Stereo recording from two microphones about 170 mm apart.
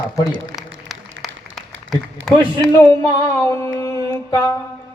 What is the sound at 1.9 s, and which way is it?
Speech, 5° left (ahead or behind).